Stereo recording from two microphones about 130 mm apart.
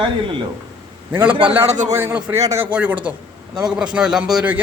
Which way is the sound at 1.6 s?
65° right (ahead or behind).